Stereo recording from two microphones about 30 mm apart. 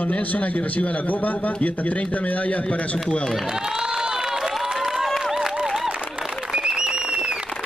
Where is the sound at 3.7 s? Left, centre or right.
Right.